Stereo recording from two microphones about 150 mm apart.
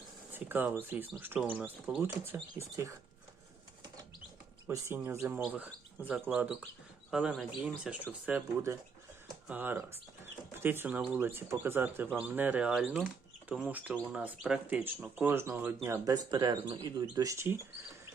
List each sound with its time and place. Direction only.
0.3 s speech: 15° right (ahead or behind)
4.6 s speech: 20° right (ahead or behind)
9.5 s speech: 10° right (ahead or behind)